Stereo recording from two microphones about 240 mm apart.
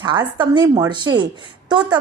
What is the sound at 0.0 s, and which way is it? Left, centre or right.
A woman's voice, centre.